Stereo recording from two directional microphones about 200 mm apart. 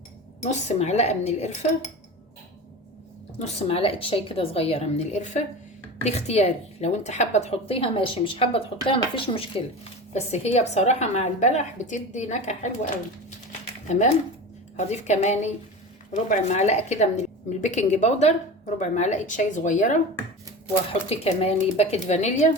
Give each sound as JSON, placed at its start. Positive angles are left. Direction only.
{"t": 0.4, "sound": "a woman's voice", "side_deg": 35}
{"t": 3.3, "sound": "a woman's voice", "side_deg": 30}
{"t": 13.9, "sound": "a woman's voice", "side_deg": 35}
{"t": 21.1, "sound": "a woman's voice", "side_deg": 30}